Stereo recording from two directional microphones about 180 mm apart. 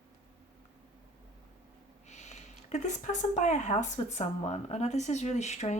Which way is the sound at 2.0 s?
40° left (ahead or behind).